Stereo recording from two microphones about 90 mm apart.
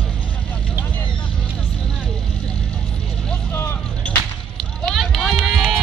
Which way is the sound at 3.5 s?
25° left (ahead or behind).